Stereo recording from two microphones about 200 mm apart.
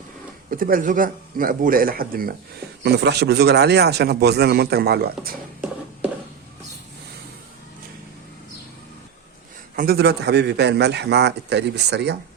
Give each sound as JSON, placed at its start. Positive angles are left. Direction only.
{"t": 0.5, "sound": "a man's voice", "side_deg": -45}
{"t": 9.7, "sound": "a man's voice", "side_deg": -50}